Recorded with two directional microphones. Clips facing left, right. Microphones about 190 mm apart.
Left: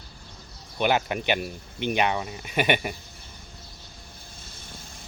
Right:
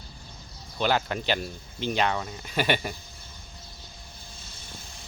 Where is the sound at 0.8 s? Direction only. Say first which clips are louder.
Left 2 dB; 15° left (ahead or behind).